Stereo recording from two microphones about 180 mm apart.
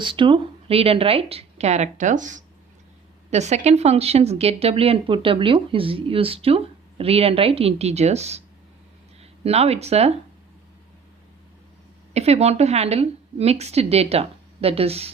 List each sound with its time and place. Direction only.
0.0 s speech: 25° right (ahead or behind)
9.4 s speech: 35° right (ahead or behind)
12.1 s speech: 35° right (ahead or behind)